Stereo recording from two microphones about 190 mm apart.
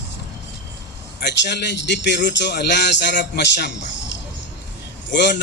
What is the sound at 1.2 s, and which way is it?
A man's voice, 65° left (ahead or behind).